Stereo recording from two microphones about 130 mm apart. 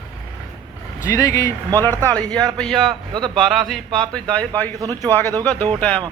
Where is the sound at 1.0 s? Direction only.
25° left (ahead or behind).